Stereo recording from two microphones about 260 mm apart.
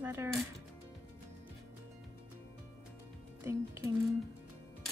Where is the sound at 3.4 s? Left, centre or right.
Centre.